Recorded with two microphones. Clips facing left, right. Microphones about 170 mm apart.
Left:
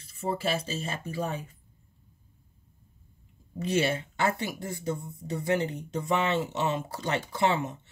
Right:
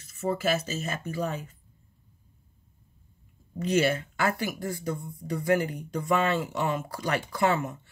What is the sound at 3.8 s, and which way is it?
Speech, 25° left (ahead or behind).